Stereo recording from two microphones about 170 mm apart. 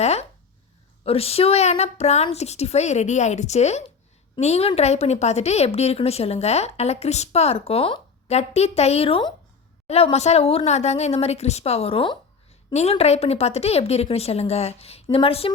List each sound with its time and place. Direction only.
0.0 s a woman's voice: 40° left (ahead or behind)